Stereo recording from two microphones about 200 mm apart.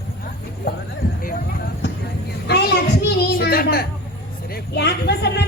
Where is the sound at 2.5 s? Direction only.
55° left (ahead or behind).